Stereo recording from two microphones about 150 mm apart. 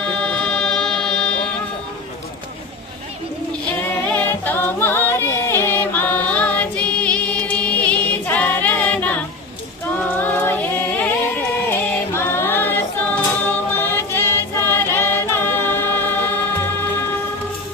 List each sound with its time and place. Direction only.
0.2 s music: 5° left (ahead or behind)
4.1 s music: 10° left (ahead or behind)
10.0 s a capella: 15° left (ahead or behind)
11.7 s music: 15° left (ahead or behind)